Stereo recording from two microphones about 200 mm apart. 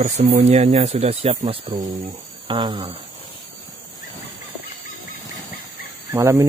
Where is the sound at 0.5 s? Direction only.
35° right (ahead or behind).